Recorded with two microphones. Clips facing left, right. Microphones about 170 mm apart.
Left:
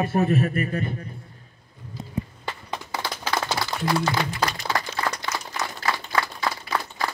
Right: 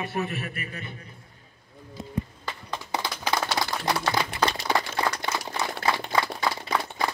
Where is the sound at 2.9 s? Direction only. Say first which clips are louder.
Right 1 dB; 20° right (ahead or behind).